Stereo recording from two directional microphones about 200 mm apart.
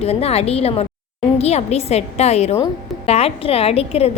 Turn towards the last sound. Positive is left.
turn(degrees=30)  # may be behind; listen again after turning